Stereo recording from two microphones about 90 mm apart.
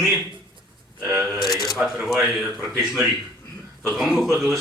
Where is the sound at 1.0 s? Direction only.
20° right (ahead or behind).